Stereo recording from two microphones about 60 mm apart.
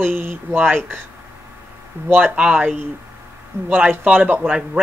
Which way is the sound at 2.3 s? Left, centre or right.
Right.